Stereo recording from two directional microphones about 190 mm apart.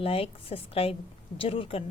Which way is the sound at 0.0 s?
30° left (ahead or behind).